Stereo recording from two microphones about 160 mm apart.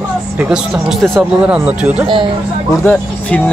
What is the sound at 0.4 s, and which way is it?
Speech, 5° right (ahead or behind).